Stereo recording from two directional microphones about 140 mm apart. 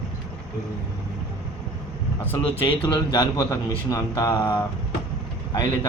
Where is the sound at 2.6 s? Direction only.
40° left (ahead or behind).